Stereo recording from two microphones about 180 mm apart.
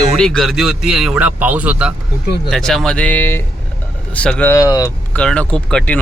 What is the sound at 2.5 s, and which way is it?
Speech, centre (ahead or behind).